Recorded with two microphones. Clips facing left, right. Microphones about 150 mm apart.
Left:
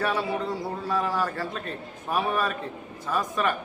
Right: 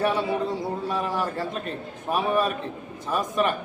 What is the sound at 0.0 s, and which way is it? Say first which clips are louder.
A man's voice: right 3 dB; 20° right (ahead or behind).